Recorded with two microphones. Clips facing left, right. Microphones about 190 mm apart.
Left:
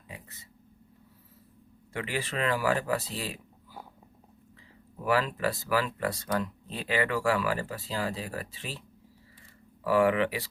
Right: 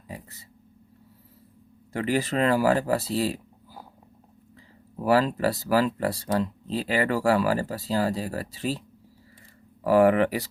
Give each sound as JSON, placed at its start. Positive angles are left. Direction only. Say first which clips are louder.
{"t": 0.1, "sound": "speech", "louder": "right 7 dB", "side_deg": -35}
{"t": 1.9, "sound": "speech", "louder": "right 8 dB", "side_deg": -40}
{"t": 5.0, "sound": "speech", "louder": "right 6 dB", "side_deg": -35}
{"t": 9.8, "sound": "speech", "louder": "right 5 dB", "side_deg": -40}